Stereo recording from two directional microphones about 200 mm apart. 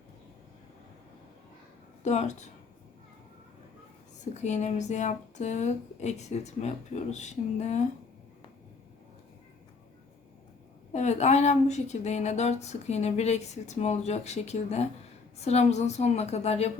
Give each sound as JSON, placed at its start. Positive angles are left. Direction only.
{"t": 2.0, "sound": "speech", "side_deg": 35}
{"t": 4.4, "sound": "speech", "side_deg": 35}
{"t": 10.9, "sound": "speech", "side_deg": 35}